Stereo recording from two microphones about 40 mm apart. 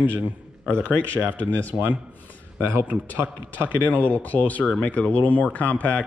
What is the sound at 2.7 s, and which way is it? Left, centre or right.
Speech, right.